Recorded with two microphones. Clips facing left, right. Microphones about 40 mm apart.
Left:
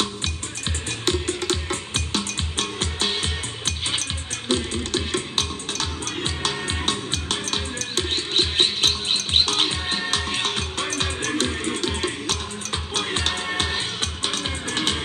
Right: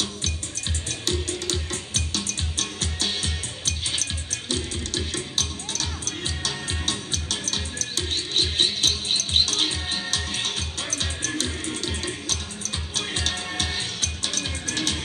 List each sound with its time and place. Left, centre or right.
0.8 s music: left